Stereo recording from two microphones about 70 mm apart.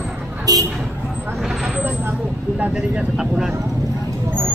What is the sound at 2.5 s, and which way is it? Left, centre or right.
Vehicle, centre.